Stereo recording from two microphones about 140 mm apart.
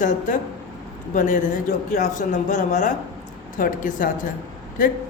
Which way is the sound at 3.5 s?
75° left (ahead or behind).